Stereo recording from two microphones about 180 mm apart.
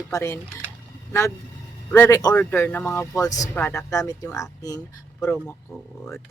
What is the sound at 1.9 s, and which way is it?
Speech, 15° left (ahead or behind).